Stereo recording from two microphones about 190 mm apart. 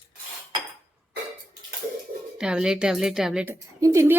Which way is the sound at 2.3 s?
5° right (ahead or behind).